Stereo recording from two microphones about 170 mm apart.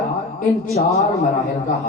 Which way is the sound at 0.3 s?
45° left (ahead or behind).